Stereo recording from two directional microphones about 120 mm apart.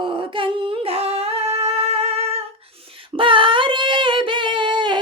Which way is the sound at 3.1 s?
45° right (ahead or behind).